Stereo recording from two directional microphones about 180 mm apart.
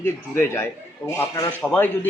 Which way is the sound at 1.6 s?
5° left (ahead or behind).